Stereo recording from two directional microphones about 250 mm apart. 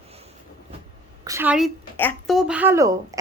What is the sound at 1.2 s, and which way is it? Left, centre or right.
A woman's voice, centre.